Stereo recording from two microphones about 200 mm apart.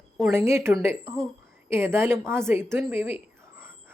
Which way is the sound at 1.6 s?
10° right (ahead or behind).